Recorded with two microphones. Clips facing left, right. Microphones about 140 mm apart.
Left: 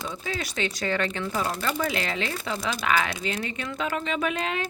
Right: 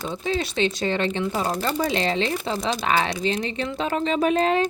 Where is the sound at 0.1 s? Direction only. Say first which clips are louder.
Right 7 dB; 30° right (ahead or behind).